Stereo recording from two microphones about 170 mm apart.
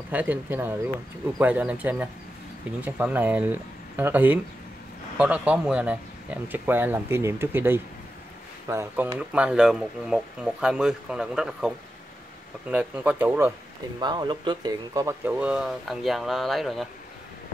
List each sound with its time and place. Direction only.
0.1 s speech: 10° right (ahead or behind)
13.9 s speech: 25° right (ahead or behind)
15.3 s speech: 5° right (ahead or behind)